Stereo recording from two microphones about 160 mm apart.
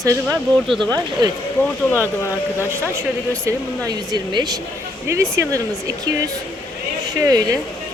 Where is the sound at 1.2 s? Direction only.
25° right (ahead or behind).